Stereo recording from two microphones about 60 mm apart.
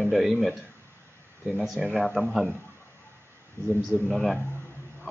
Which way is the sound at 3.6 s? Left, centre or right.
Right.